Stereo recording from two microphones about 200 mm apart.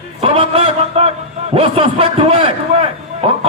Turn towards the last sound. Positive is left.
turn(degrees=-30)  # may be behind; listen again after turning